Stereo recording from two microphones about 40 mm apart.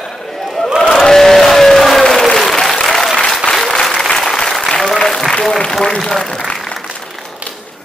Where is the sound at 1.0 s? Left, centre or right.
Centre.